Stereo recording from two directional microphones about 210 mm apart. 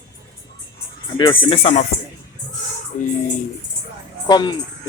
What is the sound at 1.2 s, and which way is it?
Speech, 25° left (ahead or behind).